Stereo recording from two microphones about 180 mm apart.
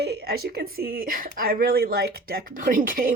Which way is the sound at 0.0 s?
60° right (ahead or behind).